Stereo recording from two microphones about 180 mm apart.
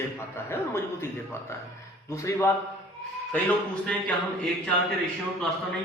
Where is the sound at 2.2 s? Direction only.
15° left (ahead or behind).